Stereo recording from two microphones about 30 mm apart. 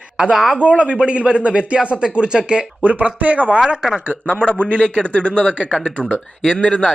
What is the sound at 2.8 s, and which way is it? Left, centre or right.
Speech, right.